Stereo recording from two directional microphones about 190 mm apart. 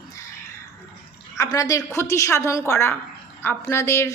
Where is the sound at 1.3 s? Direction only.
15° left (ahead or behind).